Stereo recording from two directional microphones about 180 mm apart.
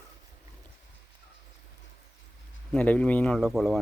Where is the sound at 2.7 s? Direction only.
10° left (ahead or behind).